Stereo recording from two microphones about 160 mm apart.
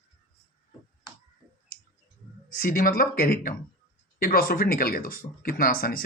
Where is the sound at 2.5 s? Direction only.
65° left (ahead or behind).